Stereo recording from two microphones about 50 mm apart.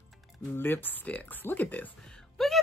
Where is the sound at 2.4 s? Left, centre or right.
Centre.